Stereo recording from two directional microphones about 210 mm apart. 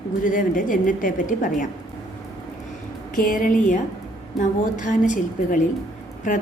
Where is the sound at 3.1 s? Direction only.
40° left (ahead or behind).